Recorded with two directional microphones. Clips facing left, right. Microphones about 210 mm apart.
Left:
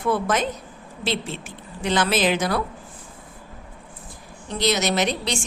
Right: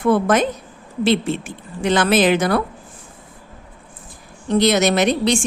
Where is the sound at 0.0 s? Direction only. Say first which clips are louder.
Right 6 dB; 55° right (ahead or behind).